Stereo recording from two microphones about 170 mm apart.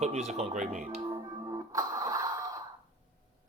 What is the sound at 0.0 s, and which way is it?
Speech, 40° right (ahead or behind).